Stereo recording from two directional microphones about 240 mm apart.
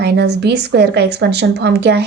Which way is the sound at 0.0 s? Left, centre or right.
Right.